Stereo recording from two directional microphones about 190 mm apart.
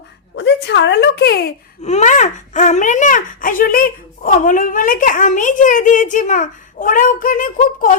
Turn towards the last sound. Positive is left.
turn(degrees=45)  # may be behind; listen again after turning